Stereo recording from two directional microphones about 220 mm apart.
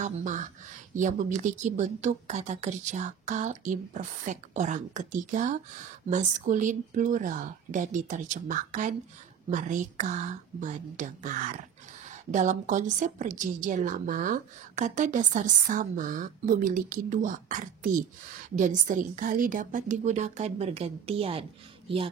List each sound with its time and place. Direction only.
0.0 s a woman's voice: 35° right (ahead or behind)